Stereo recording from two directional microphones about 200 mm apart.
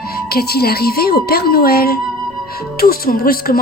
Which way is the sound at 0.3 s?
50° left (ahead or behind).